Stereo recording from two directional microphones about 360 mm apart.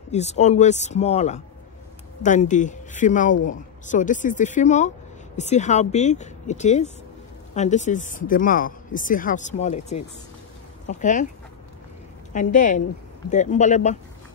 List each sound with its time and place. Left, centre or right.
0.1 s speech: centre
12.3 s speech: left